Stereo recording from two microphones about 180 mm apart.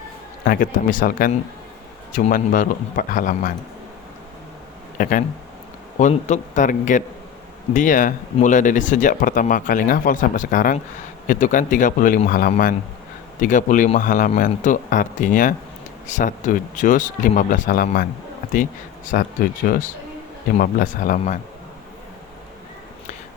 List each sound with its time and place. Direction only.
0.4 s speech: 55° left (ahead or behind)
4.9 s speech: 45° left (ahead or behind)
19.0 s speech: 50° left (ahead or behind)